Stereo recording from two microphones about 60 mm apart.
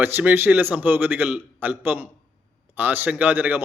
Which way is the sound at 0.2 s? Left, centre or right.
Right.